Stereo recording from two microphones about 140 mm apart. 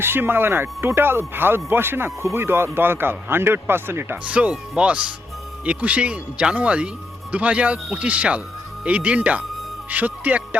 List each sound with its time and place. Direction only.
0.0 s a man's voice: 15° right (ahead or behind)